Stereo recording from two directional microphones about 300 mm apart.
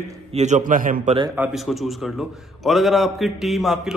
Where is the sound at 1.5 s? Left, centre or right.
Centre.